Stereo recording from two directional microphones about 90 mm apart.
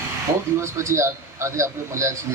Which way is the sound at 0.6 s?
30° right (ahead or behind).